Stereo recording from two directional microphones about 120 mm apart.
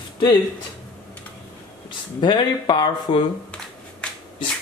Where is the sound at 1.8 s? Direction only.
40° left (ahead or behind).